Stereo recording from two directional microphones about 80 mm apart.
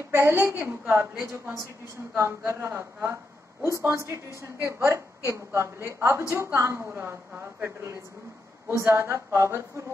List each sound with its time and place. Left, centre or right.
0.1 s a woman's voice: right
1.3 s a woman's voice: right